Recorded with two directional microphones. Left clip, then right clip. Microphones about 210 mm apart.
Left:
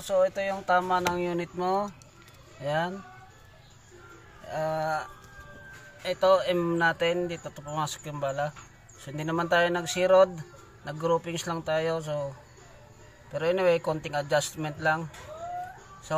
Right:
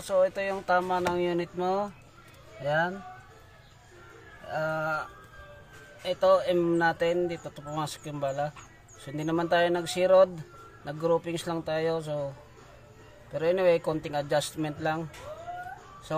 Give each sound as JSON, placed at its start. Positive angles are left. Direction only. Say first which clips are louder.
{"t": 0.1, "sound": "speech", "louder": "even", "side_deg": -5}
{"t": 4.5, "sound": "speech", "louder": "left 1 dB", "side_deg": 0}
{"t": 6.0, "sound": "speech", "louder": "even", "side_deg": -10}
{"t": 13.3, "sound": "speech", "louder": "even", "side_deg": -10}